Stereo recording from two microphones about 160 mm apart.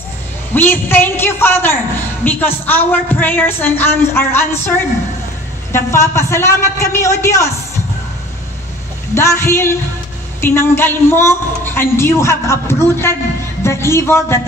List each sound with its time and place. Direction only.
0.6 s a woman's voice: 15° left (ahead or behind)
9.1 s a woman's voice: 15° left (ahead or behind)